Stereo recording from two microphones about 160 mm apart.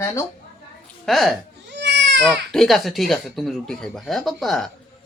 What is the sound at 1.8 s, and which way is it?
Baby cry, 90° right.